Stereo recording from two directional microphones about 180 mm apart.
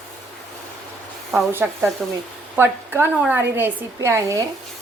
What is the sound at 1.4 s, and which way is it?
A woman's voice, 10° right (ahead or behind).